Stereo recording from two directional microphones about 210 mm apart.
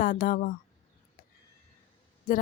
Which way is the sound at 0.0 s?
40° left (ahead or behind).